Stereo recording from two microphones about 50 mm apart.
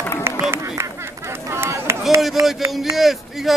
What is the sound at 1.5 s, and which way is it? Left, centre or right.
Run, right.